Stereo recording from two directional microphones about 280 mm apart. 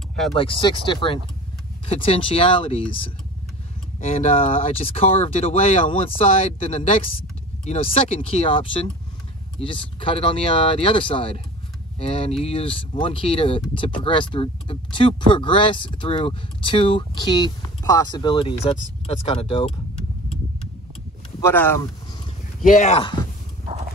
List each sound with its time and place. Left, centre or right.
0.4 s speech: centre
21.4 s speech: centre
22.6 s speech: left